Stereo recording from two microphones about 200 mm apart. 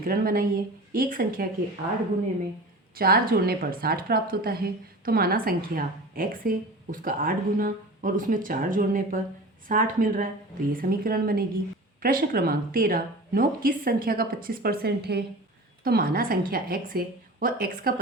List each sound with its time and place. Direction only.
0.0 s speech: 45° right (ahead or behind)
2.9 s speech: 50° right (ahead or behind)